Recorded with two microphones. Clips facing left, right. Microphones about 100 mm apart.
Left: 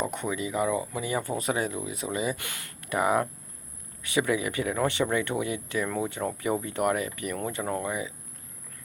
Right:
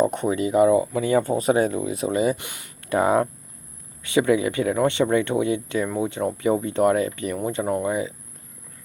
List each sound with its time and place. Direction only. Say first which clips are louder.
0.0 s speech: right 9 dB; 35° right (ahead or behind)
1.1 s speech: right 9 dB; 30° right (ahead or behind)
2.4 s speech: right 1 dB; 20° right (ahead or behind)
2.9 s speech: right 6 dB; 30° right (ahead or behind)